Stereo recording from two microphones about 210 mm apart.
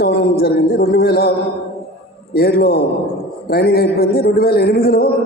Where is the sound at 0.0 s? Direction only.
45° left (ahead or behind).